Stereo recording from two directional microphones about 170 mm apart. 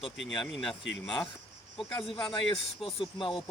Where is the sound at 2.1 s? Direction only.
25° left (ahead or behind).